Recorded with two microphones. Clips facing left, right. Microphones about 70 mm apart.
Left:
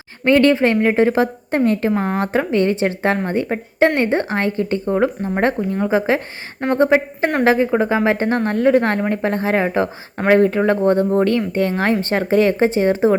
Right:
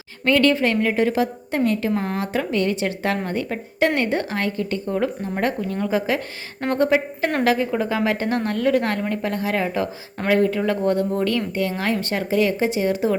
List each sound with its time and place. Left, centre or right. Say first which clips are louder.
0.3 s a woman's voice: left 4 dB; left